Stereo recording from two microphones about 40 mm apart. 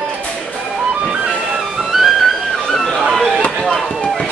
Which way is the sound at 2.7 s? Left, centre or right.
Centre.